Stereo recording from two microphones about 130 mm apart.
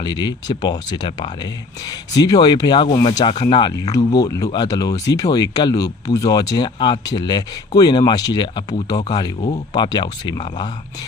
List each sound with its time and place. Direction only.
0.0 s speech: 35° left (ahead or behind)
3.7 s speech: 30° left (ahead or behind)